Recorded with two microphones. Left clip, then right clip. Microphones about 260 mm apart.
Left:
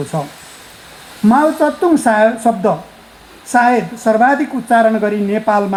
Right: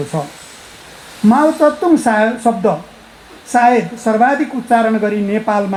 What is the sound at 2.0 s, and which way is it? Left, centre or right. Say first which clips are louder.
A woman's voice: left 2 dB; left.